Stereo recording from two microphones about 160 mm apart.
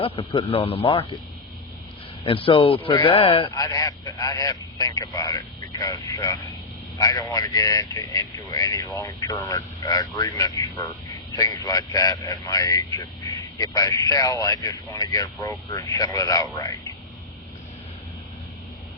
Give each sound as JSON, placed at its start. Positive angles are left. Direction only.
{"t": 0.0, "sound": "speech", "side_deg": 35}
{"t": 2.2, "sound": "speech", "side_deg": 35}
{"t": 3.5, "sound": "speech", "side_deg": 20}